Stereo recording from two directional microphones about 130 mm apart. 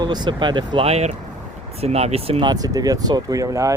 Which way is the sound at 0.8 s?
55° right (ahead or behind).